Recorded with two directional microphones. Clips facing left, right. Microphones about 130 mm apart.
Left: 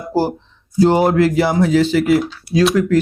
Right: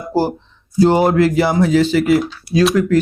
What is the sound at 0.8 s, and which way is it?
Speech, 10° right (ahead or behind).